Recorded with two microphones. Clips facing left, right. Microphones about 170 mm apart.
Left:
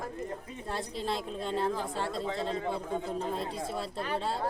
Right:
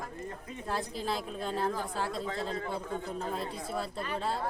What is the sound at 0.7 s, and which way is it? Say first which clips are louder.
Speech: even; centre (ahead or behind).